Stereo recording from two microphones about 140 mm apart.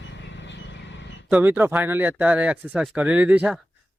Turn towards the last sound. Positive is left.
turn(degrees=-10)  # may be behind; listen again after turning